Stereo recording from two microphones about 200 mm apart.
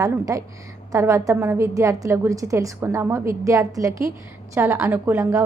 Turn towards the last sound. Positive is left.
turn(degrees=-10)  # may be behind; listen again after turning